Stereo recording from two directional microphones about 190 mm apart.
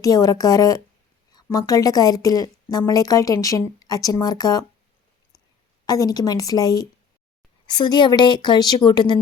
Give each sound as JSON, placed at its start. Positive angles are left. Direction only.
{"t": 0.0, "sound": "a woman's voice", "side_deg": 20}
{"t": 5.8, "sound": "a woman's voice", "side_deg": 20}